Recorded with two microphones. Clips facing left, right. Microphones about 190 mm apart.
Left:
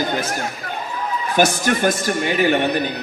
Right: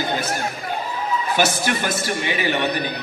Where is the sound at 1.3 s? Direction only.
45° left (ahead or behind).